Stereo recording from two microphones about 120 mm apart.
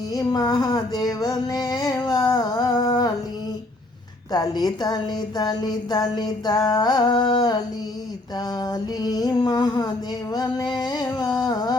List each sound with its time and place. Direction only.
0.1 s a sound: 30° left (ahead or behind)
4.3 s music: 35° left (ahead or behind)
8.6 s music: 35° left (ahead or behind)